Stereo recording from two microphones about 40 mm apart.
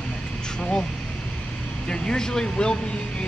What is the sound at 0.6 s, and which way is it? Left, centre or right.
Vehicle, left.